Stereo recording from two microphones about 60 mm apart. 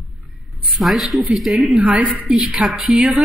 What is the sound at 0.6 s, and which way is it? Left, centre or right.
Speech, centre.